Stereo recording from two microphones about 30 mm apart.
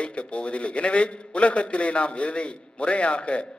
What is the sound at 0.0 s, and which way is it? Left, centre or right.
A man's voice, left.